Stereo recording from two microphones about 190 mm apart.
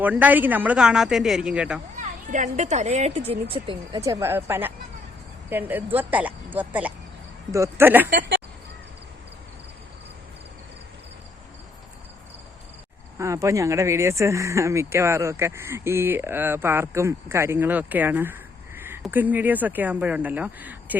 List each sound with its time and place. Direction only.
0.0 s speech: 10° right (ahead or behind)
2.0 s speech: 40° right (ahead or behind)
4.0 s speech: 15° right (ahead or behind)
13.1 s speech: 15° right (ahead or behind)